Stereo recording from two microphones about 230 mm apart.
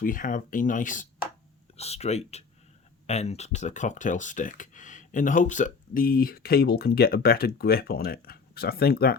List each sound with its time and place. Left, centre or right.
0.0 s speech: left